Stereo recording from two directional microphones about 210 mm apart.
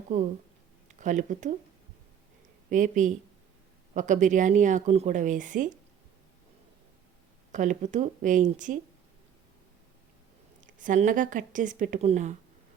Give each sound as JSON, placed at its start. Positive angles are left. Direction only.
{"t": 0.1, "sound": "a woman's voice", "side_deg": -35}
{"t": 2.6, "sound": "a woman's voice", "side_deg": -40}
{"t": 7.5, "sound": "a woman's voice", "side_deg": -35}
{"t": 10.6, "sound": "a woman's voice", "side_deg": -40}